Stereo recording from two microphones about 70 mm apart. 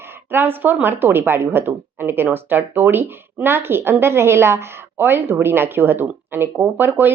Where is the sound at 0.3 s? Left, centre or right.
Right.